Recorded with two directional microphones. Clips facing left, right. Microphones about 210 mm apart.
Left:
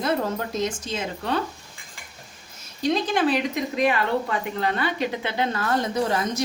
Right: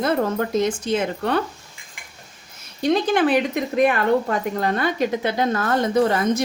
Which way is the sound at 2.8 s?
60° right (ahead or behind).